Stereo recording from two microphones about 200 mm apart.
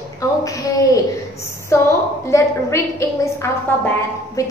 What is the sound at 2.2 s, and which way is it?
A woman's voice, 15° left (ahead or behind).